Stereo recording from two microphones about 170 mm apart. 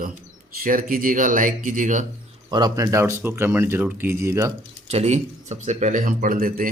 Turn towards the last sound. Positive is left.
turn(degrees=-55)  # may be behind; listen again after turning